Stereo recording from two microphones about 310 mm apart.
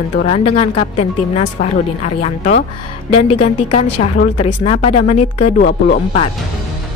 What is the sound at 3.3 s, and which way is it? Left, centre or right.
Speech, centre.